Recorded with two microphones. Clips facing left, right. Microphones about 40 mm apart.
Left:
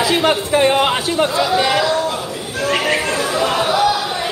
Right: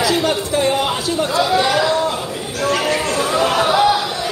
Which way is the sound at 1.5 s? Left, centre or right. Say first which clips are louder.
Even; left.